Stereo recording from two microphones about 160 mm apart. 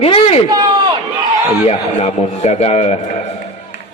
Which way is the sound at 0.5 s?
25° right (ahead or behind).